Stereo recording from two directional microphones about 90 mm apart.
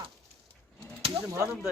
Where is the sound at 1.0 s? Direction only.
90° right.